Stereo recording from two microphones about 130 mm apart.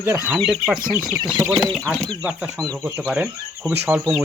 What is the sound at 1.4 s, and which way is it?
Speech, 25° right (ahead or behind).